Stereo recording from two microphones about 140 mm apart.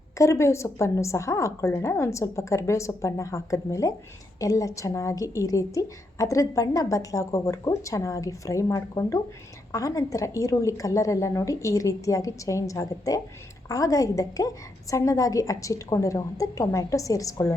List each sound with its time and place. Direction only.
0.2 s a woman's voice: 20° left (ahead or behind)